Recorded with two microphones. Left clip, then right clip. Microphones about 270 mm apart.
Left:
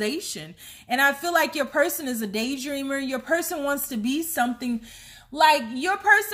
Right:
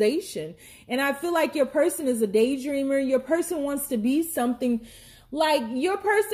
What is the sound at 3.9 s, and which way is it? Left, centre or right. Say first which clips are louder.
A woman's voice: even; left.